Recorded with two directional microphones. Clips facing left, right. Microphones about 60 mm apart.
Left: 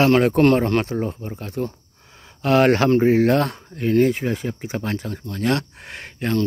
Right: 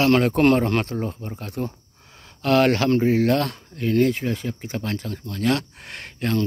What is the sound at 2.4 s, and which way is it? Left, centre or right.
Speech, left.